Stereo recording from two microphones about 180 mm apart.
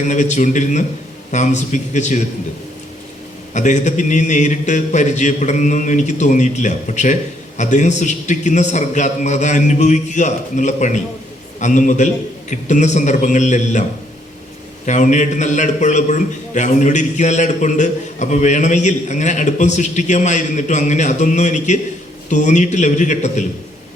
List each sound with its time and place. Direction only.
0.1 s a man's voice: 45° left (ahead or behind)
3.5 s a man's voice: 40° left (ahead or behind)
14.8 s a man's voice: 40° left (ahead or behind)